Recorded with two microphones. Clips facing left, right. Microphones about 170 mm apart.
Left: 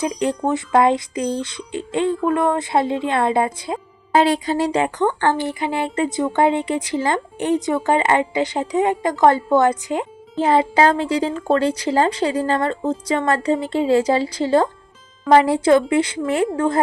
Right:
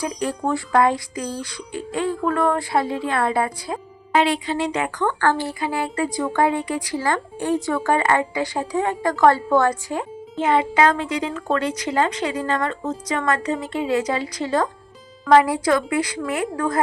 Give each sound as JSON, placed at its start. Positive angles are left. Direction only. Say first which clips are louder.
{"t": 0.0, "sound": "speech", "louder": "left 4 dB", "side_deg": 20}
{"t": 4.1, "sound": "speech", "louder": "left 3 dB", "side_deg": 40}
{"t": 5.0, "sound": "speech", "louder": "left 2 dB", "side_deg": 20}
{"t": 10.3, "sound": "speech", "louder": "left 3 dB", "side_deg": 30}